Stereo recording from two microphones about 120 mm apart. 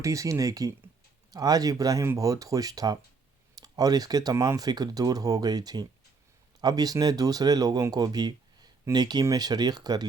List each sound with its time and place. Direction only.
0.0 s speech: 25° right (ahead or behind)